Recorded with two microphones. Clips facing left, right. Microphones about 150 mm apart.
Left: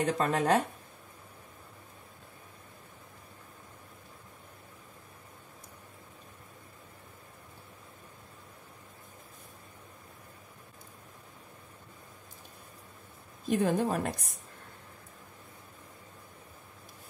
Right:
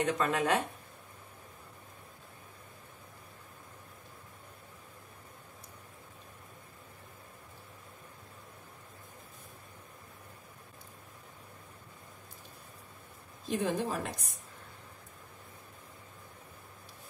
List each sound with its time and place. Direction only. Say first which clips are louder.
0.0 s speech: left 2 dB; 35° left (ahead or behind)
13.5 s a woman's voice: left 4 dB; 50° left (ahead or behind)